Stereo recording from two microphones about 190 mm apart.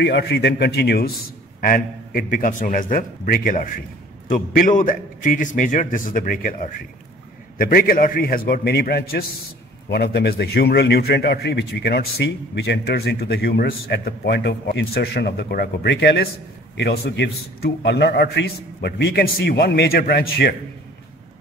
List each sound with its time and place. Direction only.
0.0 s a man's voice: 60° left (ahead or behind)